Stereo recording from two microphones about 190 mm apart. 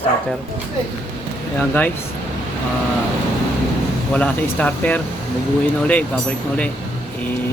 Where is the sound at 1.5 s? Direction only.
10° left (ahead or behind).